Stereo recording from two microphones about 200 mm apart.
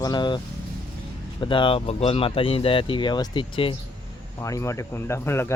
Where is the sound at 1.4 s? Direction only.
25° left (ahead or behind).